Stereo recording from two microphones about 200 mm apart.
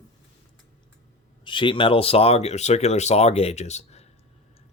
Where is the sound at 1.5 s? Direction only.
25° left (ahead or behind).